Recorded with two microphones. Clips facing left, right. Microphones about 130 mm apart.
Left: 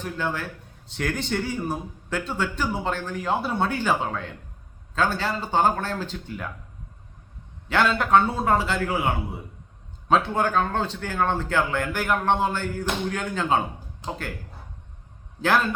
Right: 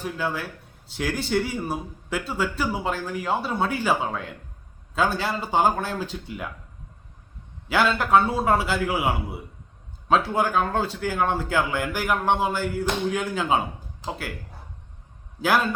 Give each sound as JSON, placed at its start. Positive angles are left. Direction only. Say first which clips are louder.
{"t": 0.0, "sound": "a man's voice", "louder": "even", "side_deg": -5}
{"t": 7.7, "sound": "a man's voice", "louder": "even", "side_deg": -5}
{"t": 15.4, "sound": "a man's voice", "louder": "even", "side_deg": -10}